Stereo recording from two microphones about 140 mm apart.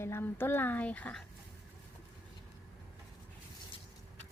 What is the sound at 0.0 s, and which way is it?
Speech, 15° left (ahead or behind).